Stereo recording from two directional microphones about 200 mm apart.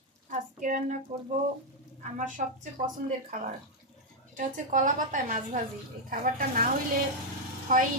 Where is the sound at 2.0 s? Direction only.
40° right (ahead or behind).